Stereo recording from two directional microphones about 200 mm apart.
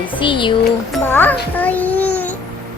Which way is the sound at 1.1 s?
10° left (ahead or behind).